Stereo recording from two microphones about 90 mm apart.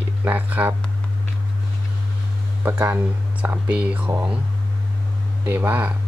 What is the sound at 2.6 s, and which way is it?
Speech, 20° right (ahead or behind).